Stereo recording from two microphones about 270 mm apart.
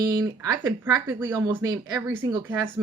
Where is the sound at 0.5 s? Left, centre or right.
Centre.